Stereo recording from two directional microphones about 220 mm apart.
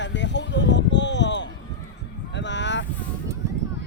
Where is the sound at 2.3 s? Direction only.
55° left (ahead or behind).